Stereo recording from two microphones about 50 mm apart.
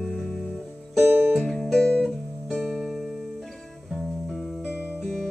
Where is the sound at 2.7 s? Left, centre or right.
Centre.